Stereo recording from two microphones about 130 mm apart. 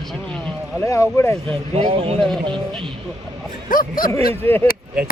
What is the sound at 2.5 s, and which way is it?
Speech, 5° left (ahead or behind).